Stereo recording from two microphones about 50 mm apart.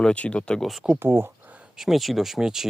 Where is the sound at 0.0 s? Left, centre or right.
Left.